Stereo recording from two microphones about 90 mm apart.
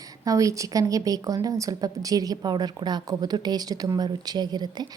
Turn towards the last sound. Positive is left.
turn(degrees=-50)  # may be behind; listen again after turning